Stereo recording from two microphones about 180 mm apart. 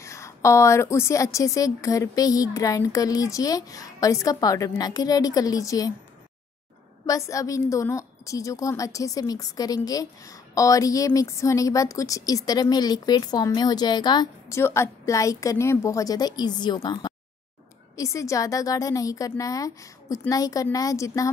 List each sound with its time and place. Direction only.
0.0 s a woman's voice: 15° left (ahead or behind)
7.1 s a woman's voice: 15° left (ahead or behind)